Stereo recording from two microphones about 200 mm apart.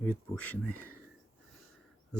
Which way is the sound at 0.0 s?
5° left (ahead or behind).